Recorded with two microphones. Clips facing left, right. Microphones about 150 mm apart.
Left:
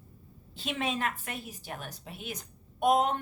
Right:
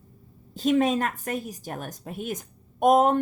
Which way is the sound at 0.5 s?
40° right (ahead or behind).